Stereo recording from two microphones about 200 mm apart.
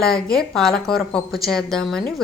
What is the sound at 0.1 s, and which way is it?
A woman's voice, 5° left (ahead or behind).